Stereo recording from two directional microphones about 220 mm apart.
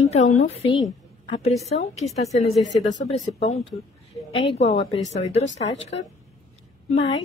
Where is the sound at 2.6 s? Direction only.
55° left (ahead or behind).